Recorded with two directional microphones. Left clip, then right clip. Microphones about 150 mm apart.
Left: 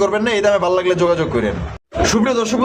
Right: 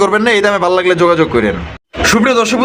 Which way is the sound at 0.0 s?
35° right (ahead or behind).